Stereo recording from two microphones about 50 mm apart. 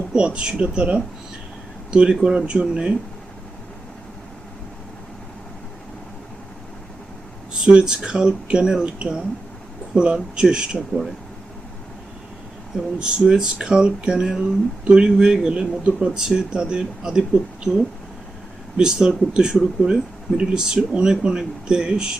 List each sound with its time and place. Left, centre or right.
0.1 s speech: right
7.6 s speech: centre
13.0 s speech: centre
18.8 s speech: centre